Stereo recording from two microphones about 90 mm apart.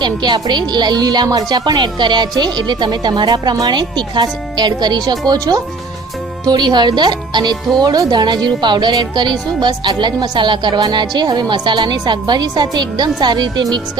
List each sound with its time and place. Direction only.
0.0 s a woman's voice: 55° right (ahead or behind)